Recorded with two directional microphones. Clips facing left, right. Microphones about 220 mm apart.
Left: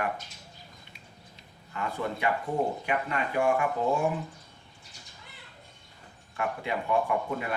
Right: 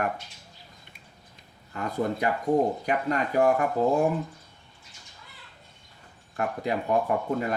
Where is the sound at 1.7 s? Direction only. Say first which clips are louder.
Right 4 dB; 40° right (ahead or behind).